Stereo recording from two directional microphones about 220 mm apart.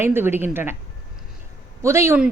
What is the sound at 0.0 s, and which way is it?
Speech, 10° right (ahead or behind).